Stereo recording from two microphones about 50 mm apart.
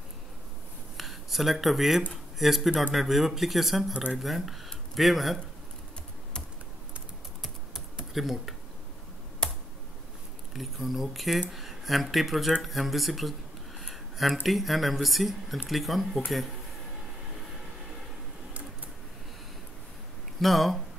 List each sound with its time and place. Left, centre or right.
0.9 s speech: centre
3.9 s speech: right
4.2 s speech: centre
7.7 s computer keyboard: centre
9.4 s computer keyboard: centre
10.5 s speech: centre
20.3 s speech: centre